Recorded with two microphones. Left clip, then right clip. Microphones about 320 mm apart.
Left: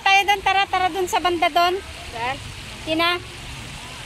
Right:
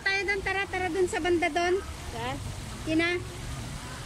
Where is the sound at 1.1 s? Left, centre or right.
Left.